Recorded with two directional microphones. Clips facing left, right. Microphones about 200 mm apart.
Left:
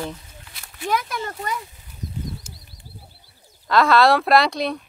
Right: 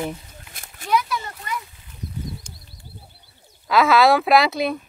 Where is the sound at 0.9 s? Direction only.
50° left (ahead or behind).